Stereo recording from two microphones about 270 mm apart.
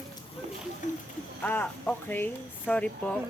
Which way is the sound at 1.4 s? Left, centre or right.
Centre.